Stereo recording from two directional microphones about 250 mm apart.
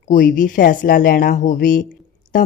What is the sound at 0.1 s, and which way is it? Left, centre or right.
Speech, left.